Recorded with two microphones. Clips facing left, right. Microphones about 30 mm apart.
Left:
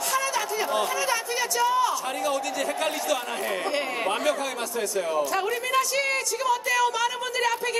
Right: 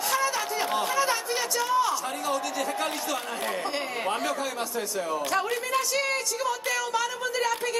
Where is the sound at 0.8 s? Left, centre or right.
Right.